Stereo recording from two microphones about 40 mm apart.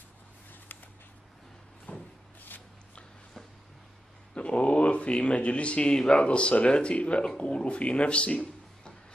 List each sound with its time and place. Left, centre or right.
1.9 s cupboard open or close: left
4.4 s speech: left